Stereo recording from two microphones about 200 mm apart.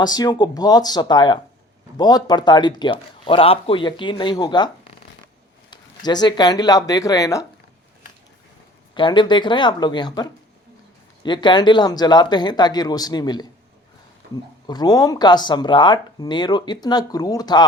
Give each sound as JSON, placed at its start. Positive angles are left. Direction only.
{"t": 0.0, "sound": "speech", "side_deg": 20}
{"t": 6.1, "sound": "speech", "side_deg": 20}
{"t": 9.0, "sound": "speech", "side_deg": 25}
{"t": 14.7, "sound": "speech", "side_deg": 20}